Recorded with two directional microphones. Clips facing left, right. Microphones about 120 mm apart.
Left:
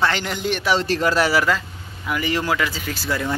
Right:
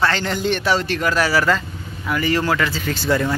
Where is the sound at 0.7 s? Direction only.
30° left (ahead or behind); by 3.3 s 5° left (ahead or behind).